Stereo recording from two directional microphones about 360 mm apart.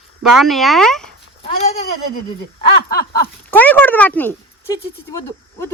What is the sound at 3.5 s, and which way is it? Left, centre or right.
A woman's voice, centre.